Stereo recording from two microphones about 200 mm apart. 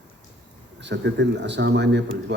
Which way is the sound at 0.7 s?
60° right (ahead or behind).